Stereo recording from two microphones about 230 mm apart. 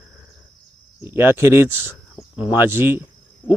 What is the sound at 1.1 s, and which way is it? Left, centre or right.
Speech, centre.